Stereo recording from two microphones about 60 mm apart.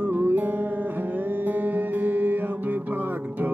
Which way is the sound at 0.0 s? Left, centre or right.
Right.